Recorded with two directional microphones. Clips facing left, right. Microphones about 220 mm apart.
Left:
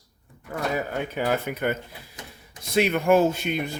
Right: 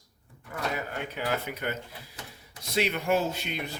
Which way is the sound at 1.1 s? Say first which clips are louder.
Left 6 dB; 50° left (ahead or behind).